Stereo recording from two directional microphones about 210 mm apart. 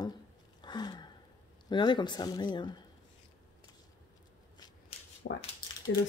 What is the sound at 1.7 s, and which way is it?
Speech, 20° left (ahead or behind).